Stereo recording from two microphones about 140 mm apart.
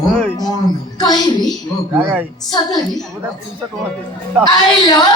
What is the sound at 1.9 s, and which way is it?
Speech, 15° right (ahead or behind).